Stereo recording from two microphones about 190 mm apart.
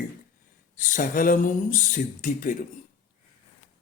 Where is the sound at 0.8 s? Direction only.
45° left (ahead or behind).